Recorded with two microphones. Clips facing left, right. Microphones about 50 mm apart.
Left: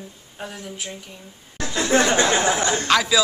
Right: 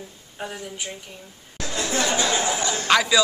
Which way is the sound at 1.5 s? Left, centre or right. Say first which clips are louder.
Left 6 dB; left.